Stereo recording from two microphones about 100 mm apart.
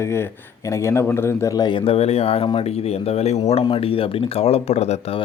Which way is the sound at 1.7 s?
75° left (ahead or behind).